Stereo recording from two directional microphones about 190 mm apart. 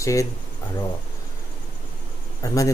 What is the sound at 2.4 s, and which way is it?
Speech, 15° left (ahead or behind).